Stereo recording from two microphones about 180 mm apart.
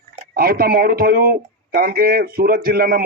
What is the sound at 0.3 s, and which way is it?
A man's voice, 55° right (ahead or behind).